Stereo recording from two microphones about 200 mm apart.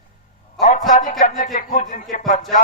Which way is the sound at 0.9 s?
40° left (ahead or behind).